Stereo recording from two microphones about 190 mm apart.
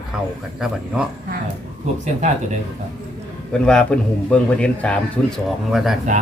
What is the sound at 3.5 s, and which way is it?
A man's voice, 5° left (ahead or behind).